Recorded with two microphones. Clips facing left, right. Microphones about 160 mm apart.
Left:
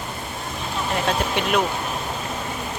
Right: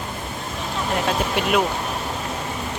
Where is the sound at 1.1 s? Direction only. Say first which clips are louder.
Right 1 dB; 5° right (ahead or behind).